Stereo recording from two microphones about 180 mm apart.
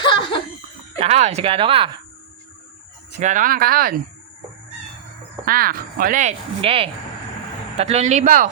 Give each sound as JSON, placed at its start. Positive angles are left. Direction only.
{"t": 0.0, "sound": "laughter", "side_deg": 25}
{"t": 0.9, "sound": "speech", "side_deg": -35}
{"t": 3.1, "sound": "speech", "side_deg": -40}
{"t": 5.5, "sound": "speech", "side_deg": -55}
{"t": 6.6, "sound": "speech", "side_deg": -30}